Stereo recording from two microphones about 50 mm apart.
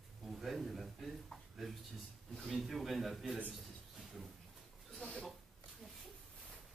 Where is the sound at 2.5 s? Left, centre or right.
Centre.